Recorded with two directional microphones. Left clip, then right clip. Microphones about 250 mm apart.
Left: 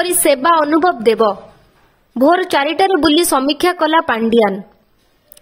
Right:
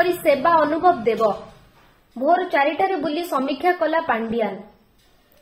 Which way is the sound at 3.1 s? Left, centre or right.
Left.